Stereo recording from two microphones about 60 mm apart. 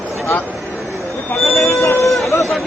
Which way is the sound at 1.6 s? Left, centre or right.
Left.